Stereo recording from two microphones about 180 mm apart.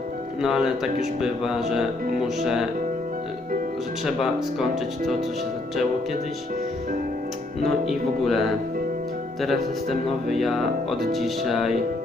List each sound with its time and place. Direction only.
0.4 s speech: 5° right (ahead or behind)
4.0 s speech: centre (ahead or behind)
7.6 s speech: centre (ahead or behind)